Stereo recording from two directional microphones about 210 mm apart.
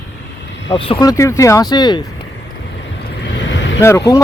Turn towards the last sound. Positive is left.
turn(degrees=15)  # may be behind; listen again after turning